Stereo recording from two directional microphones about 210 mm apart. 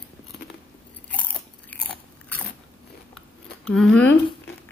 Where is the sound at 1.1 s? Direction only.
5° left (ahead or behind).